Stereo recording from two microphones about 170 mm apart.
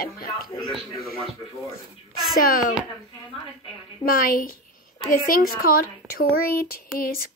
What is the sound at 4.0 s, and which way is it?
Speech, 55° left (ahead or behind).